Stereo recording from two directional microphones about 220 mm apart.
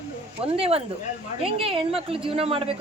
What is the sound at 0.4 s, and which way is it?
A woman's voice, 25° right (ahead or behind).